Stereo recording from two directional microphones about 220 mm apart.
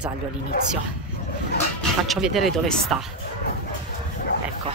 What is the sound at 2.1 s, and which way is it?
Speech, centre (ahead or behind).